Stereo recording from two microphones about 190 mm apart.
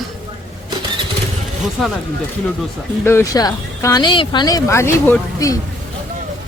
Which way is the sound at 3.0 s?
15° left (ahead or behind).